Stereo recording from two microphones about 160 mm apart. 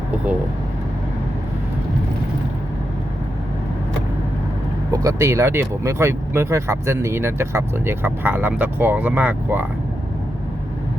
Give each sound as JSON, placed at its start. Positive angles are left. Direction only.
{"t": 4.9, "sound": "speech", "side_deg": -20}